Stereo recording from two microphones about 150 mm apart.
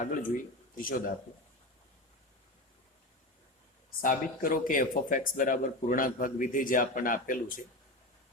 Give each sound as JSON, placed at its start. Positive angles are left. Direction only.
{"t": 0.0, "sound": "speech", "side_deg": 65}
{"t": 4.0, "sound": "speech", "side_deg": 70}